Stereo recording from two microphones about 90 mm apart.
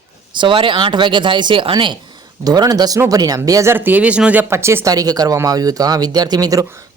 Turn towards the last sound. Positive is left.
turn(degrees=-40)  # may be behind; listen again after turning